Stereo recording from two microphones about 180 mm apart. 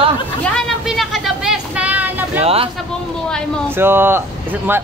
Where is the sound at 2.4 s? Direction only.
35° right (ahead or behind).